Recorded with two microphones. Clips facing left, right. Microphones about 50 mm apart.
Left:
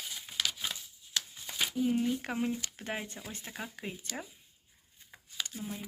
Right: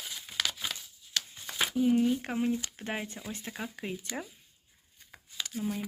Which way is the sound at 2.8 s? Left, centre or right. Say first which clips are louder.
Right 2 dB; centre.